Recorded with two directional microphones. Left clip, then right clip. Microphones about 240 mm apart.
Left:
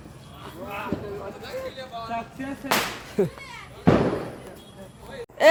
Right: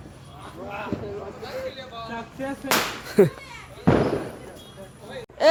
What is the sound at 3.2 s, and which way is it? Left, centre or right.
Speech, right.